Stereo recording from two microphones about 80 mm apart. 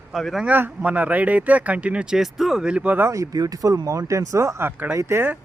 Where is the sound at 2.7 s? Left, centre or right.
Centre.